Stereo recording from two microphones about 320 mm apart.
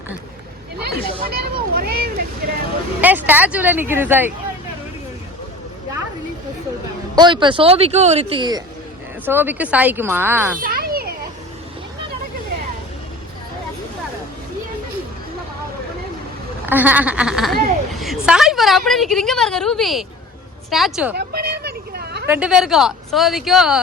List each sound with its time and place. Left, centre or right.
0.9 s a sound: right
1.7 s vehicle: right
3.0 s speech: centre
7.2 s speech: centre
10.6 s children playing: right
16.6 s speech: centre
21.2 s a sound: right
22.3 s speech: centre